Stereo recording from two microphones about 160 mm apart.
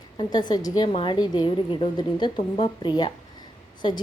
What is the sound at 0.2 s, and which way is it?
A woman's voice, 25° left (ahead or behind).